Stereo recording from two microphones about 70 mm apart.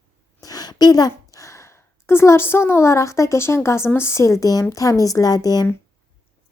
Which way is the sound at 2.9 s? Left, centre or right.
Left.